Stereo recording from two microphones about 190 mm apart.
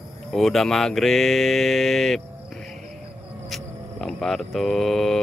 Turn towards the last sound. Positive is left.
turn(degrees=0)  # may be behind; listen again after turning